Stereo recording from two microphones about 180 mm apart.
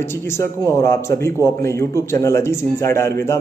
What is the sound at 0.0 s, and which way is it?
A man's voice, 15° left (ahead or behind).